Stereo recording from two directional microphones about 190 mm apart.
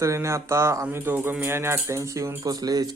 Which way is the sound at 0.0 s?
15° right (ahead or behind).